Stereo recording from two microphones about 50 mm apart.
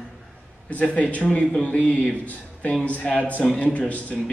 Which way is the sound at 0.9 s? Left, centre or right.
Left.